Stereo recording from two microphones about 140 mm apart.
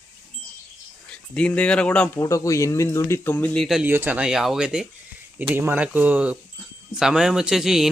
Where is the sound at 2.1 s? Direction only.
25° left (ahead or behind); by 3.8 s centre (ahead or behind).